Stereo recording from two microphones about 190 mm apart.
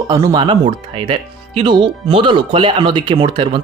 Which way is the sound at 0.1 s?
20° right (ahead or behind).